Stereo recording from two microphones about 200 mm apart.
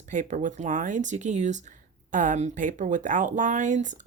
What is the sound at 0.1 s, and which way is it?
Speech, 40° right (ahead or behind).